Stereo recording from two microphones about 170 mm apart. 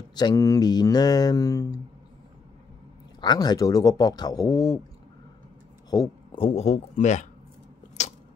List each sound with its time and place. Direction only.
0.1 s speech: 25° left (ahead or behind)
3.2 s speech: 25° left (ahead or behind)
5.9 s speech: 25° left (ahead or behind); by 7.2 s 45° left (ahead or behind)